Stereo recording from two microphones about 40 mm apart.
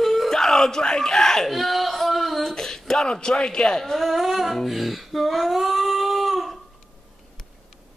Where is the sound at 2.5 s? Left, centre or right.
Centre.